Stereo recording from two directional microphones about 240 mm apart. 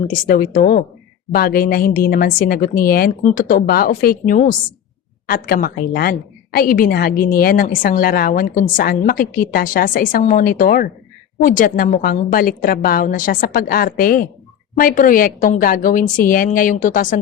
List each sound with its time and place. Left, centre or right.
0.1 s a woman's voice: left